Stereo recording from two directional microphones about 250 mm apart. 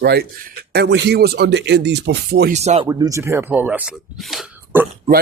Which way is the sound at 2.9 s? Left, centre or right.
Centre.